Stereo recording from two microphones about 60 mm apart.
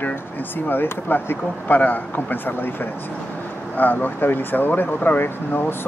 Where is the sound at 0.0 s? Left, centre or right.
Left.